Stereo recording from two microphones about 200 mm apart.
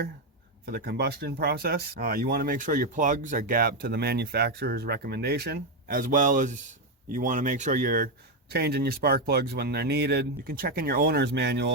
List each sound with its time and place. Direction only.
0.6 s speech: 50° right (ahead or behind)